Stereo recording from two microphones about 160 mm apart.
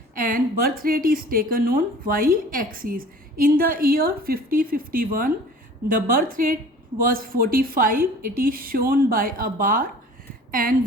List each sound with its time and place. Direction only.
0.1 s a woman's voice: 60° right (ahead or behind)